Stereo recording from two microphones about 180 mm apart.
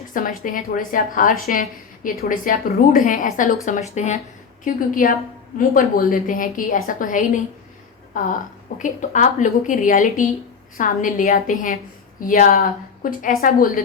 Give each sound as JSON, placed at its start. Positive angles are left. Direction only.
{"t": 0.1, "sound": "a woman's voice", "side_deg": 50}